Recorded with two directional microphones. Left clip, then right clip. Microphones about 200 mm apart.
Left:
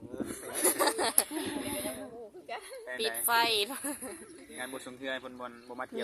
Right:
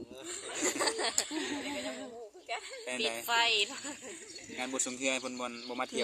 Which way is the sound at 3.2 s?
55° left (ahead or behind).